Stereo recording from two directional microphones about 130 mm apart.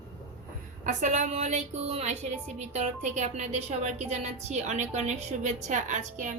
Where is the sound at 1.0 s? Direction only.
65° right (ahead or behind).